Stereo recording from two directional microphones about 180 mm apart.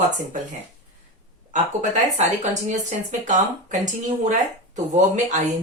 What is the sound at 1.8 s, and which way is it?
Speech, 40° right (ahead or behind).